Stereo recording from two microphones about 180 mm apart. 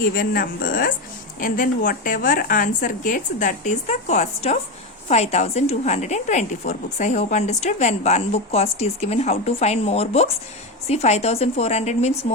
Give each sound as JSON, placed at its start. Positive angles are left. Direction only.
{"t": 0.2, "sound": "a woman's voice", "side_deg": 50}